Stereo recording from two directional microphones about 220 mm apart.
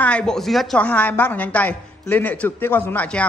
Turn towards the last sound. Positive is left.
turn(degrees=5)  # may be behind; listen again after turning